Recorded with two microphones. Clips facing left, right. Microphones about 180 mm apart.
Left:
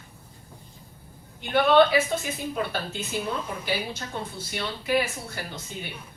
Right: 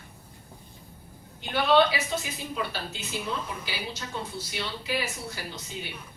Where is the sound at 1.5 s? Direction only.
50° left (ahead or behind).